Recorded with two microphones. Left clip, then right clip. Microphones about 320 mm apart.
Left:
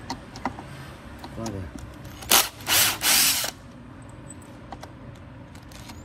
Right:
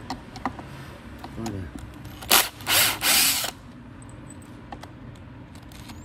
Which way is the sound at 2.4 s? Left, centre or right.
Centre.